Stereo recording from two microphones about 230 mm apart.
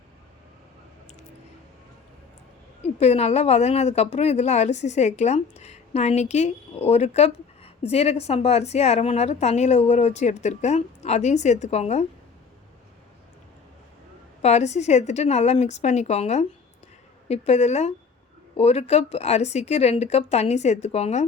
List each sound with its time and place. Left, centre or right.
3.0 s a woman's voice: left
14.4 s a woman's voice: left